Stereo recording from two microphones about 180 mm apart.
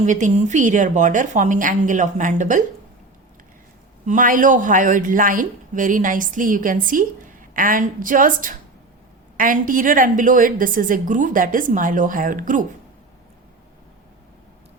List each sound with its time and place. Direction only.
0.0 s speech: 40° right (ahead or behind)
4.0 s speech: 45° right (ahead or behind)